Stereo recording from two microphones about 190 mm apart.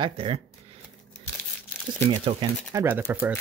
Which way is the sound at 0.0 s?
30° right (ahead or behind).